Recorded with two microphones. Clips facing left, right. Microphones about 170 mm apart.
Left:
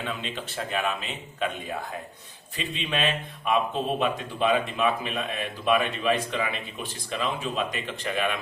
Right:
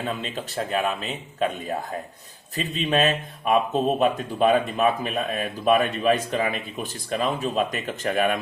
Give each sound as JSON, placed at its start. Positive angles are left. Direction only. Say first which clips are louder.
{"t": 0.0, "sound": "a man's voice", "louder": "right 4 dB", "side_deg": -40}